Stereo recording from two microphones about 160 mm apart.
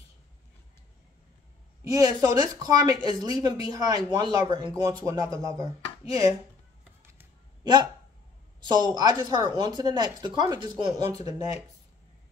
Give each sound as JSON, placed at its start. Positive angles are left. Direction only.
{"t": 1.9, "sound": "speech", "side_deg": -25}
{"t": 6.8, "sound": "music", "side_deg": -15}
{"t": 7.6, "sound": "speech", "side_deg": -25}